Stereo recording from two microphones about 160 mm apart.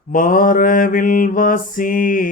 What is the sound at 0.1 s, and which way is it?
Mantra, 60° left (ahead or behind).